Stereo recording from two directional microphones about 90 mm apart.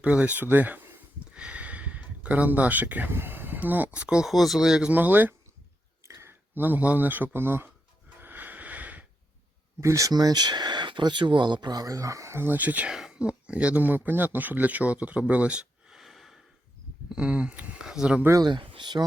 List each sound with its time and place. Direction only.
0.0 s speech: 15° right (ahead or behind)
4.9 s speech: 20° right (ahead or behind)
6.1 s clicking: 35° right (ahead or behind)
6.5 s speech: 20° right (ahead or behind)
8.2 s a sound: 20° right (ahead or behind)
9.8 s speech: 35° right (ahead or behind); by 12.9 s 20° right (ahead or behind)
12.9 s speech: 5° right (ahead or behind)
15.3 s a sound: 15° right (ahead or behind)
17.1 s speech: 10° right (ahead or behind)
18.4 s speech: 70° right (ahead or behind)